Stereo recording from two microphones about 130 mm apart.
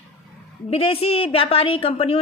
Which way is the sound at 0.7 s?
45° left (ahead or behind).